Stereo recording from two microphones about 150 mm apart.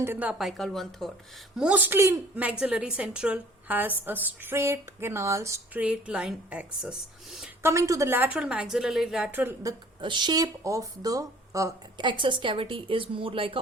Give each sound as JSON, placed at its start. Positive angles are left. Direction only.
{"t": 0.0, "sound": "a woman's voice", "side_deg": -10}
{"t": 1.5, "sound": "a woman's voice", "side_deg": -10}
{"t": 7.6, "sound": "a woman's voice", "side_deg": -20}
{"t": 9.3, "sound": "a woman's voice", "side_deg": -15}
{"t": 10.0, "sound": "speech", "side_deg": -30}